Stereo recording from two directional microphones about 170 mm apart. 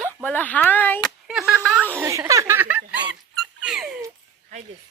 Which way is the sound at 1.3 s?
Centre (ahead or behind).